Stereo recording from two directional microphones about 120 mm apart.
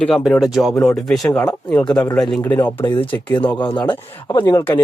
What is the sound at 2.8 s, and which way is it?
Speech, 15° left (ahead or behind).